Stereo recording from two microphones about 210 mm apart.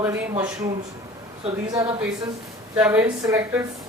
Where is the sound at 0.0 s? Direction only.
10° right (ahead or behind).